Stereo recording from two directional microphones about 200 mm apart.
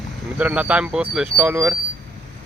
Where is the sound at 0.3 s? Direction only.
5° right (ahead or behind).